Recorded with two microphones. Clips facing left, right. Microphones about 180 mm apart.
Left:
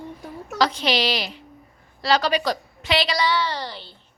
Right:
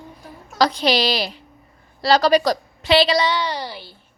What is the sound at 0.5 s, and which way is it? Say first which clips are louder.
A woman's voice: right 3 dB; 35° right (ahead or behind).